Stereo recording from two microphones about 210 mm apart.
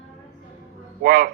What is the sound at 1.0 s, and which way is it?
Speech, 50° right (ahead or behind).